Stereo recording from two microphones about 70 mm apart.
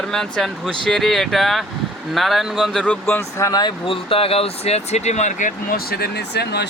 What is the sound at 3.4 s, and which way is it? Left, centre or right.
Speech, left.